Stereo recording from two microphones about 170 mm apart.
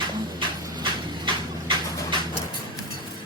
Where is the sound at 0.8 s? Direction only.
30° right (ahead or behind).